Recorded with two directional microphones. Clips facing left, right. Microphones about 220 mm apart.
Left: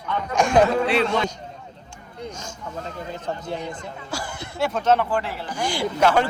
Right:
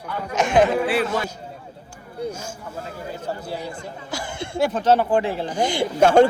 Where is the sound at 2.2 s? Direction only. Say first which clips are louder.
Right 5 dB; 10° right (ahead or behind).